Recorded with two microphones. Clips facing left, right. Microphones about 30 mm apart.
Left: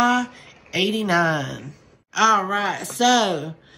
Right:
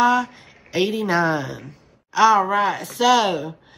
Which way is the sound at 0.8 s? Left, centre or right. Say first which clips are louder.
Left 1 dB; left.